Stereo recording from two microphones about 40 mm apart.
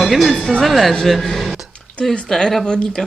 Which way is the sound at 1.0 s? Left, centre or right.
Centre.